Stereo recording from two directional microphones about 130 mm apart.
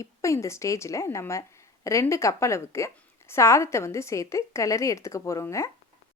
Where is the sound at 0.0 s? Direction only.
25° left (ahead or behind).